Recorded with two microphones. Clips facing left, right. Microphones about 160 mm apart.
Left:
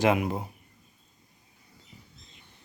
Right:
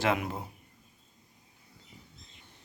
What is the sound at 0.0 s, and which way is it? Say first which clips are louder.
Speech: left 5 dB; 15° left (ahead or behind).